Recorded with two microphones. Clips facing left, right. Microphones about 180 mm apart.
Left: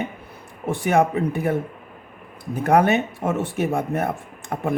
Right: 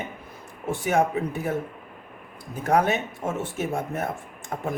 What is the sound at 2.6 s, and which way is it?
Speech, 60° left (ahead or behind).